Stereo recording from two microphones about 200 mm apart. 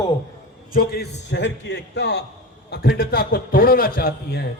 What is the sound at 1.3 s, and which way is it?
A man's voice, 60° left (ahead or behind).